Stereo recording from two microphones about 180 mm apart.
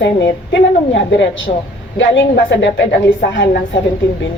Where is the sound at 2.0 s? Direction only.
80° left.